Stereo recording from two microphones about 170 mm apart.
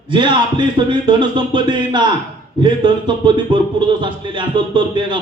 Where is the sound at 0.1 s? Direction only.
30° right (ahead or behind).